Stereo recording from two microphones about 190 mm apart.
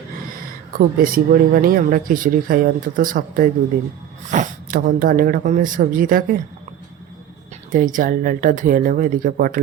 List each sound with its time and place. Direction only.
0.8 s speech: 50° right (ahead or behind)
7.7 s speech: 45° right (ahead or behind)